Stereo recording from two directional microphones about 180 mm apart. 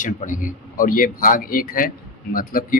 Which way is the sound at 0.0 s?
45° left (ahead or behind).